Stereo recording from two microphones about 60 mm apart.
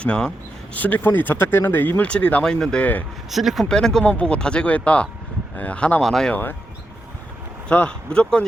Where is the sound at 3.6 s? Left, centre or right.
Centre.